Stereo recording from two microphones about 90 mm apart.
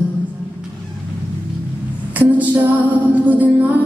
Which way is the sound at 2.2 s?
20° right (ahead or behind).